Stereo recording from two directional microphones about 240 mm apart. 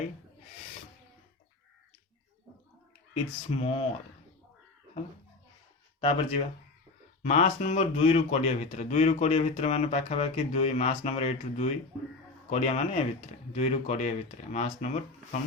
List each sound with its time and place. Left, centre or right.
3.6 s speech: left
6.0 s speech: left